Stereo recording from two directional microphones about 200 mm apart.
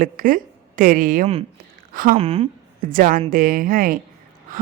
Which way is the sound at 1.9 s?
45° right (ahead or behind).